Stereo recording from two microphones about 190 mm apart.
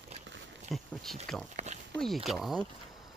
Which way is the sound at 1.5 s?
35° right (ahead or behind).